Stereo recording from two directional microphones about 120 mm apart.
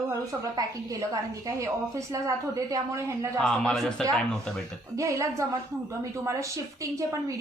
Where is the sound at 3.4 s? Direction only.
5° left (ahead or behind).